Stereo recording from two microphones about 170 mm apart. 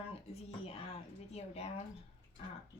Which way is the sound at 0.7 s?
35° left (ahead or behind).